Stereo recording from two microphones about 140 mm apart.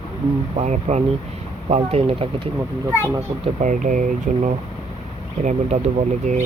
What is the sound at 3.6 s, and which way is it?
Speech, 65° right (ahead or behind).